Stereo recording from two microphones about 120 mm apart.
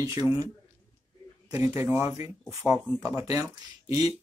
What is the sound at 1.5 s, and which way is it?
Speech, 30° right (ahead or behind).